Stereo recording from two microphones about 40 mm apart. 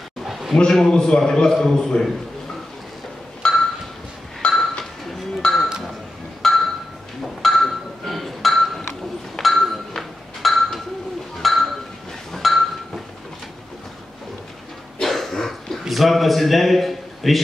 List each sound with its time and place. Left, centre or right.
0.2 s a sound: centre
0.6 s a man's voice: centre
3.4 s ping: left
4.4 s chink: left
6.4 s a sound: centre
9.4 s ping: centre
11.4 s chink: centre
15.0 s dog: centre
15.8 s a sound: centre